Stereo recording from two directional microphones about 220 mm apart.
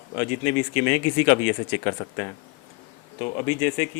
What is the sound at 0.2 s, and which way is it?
Speech, 10° left (ahead or behind).